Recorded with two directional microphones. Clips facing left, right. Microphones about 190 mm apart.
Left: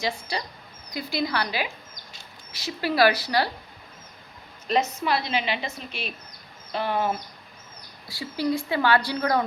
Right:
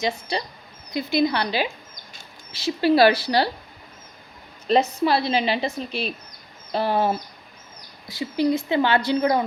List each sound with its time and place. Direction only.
0.0 s speech: 20° right (ahead or behind)
4.6 s a woman's voice: 35° right (ahead or behind)
8.0 s speech: 20° right (ahead or behind)